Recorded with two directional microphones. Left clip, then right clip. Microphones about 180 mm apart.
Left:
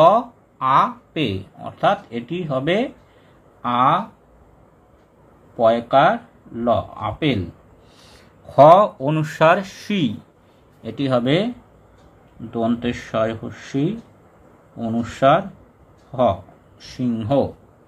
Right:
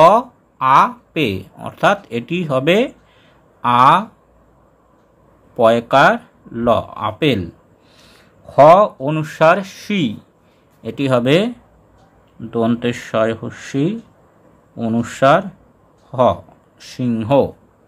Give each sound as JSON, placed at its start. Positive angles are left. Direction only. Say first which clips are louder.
{"t": 0.0, "sound": "speech", "louder": "right 4 dB", "side_deg": -30}
{"t": 5.6, "sound": "speech", "louder": "right 3 dB", "side_deg": -40}
{"t": 8.1, "sound": "speech", "louder": "right 2 dB", "side_deg": -15}